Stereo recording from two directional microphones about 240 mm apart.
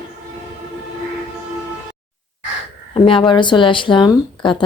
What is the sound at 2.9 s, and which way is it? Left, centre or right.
Speech, left.